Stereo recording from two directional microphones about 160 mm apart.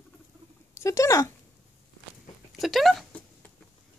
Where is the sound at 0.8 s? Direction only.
20° left (ahead or behind).